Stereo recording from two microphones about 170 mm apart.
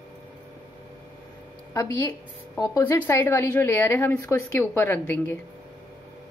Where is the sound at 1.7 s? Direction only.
20° left (ahead or behind).